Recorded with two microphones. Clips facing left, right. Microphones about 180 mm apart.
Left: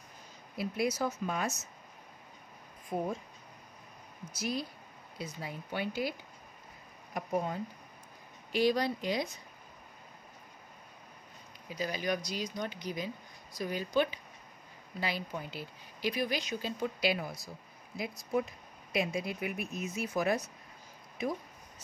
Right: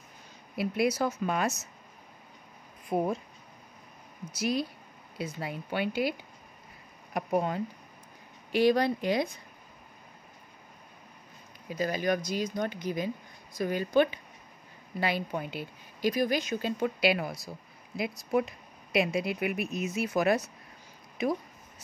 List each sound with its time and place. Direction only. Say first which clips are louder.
0.6 s speech: right 5 dB; 70° right (ahead or behind)
2.9 s speech: right 6 dB; 70° right (ahead or behind)
4.3 s speech: right 6 dB; 70° right (ahead or behind)
7.2 s speech: right 5 dB; 75° right (ahead or behind)
8.5 s speech: right 5 dB; 60° right (ahead or behind)
11.7 s speech: right 5 dB; 50° right (ahead or behind)
16.0 s speech: right 6 dB; 45° right (ahead or behind); by 21.3 s 75° right (ahead or behind)